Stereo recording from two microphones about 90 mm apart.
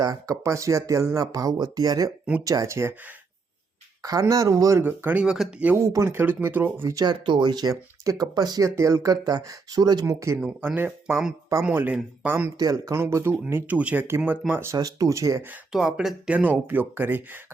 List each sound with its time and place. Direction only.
0.0 s speech: 40° right (ahead or behind)
4.0 s speech: 40° right (ahead or behind)
4.8 s speech: 20° right (ahead or behind)
5.2 s speech: 10° right (ahead or behind)
5.7 s speech: 30° right (ahead or behind)
7.0 s speech: 55° right (ahead or behind)
10.1 s speech: 35° right (ahead or behind)
10.6 s speech: 20° right (ahead or behind)
12.5 s speech: 40° right (ahead or behind)
12.9 s speech: 30° right (ahead or behind)
14.8 s speech: 40° right (ahead or behind)
15.7 s speech: 5° right (ahead or behind)